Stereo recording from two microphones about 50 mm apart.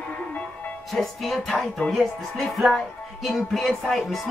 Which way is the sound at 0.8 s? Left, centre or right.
Centre.